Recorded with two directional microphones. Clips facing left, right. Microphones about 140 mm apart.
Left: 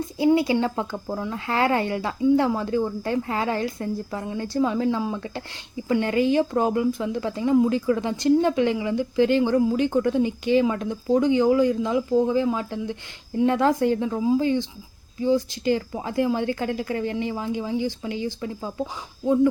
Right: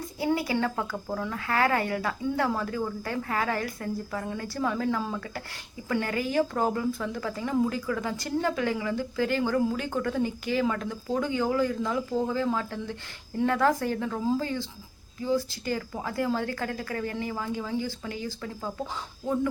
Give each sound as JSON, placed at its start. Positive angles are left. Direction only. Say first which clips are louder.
{"t": 0.2, "sound": "a woman's voice", "louder": "left 7 dB", "side_deg": 20}